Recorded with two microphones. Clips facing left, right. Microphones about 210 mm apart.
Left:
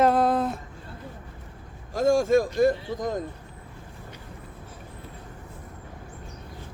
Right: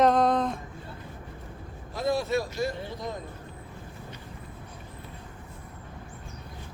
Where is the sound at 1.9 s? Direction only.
45° left (ahead or behind).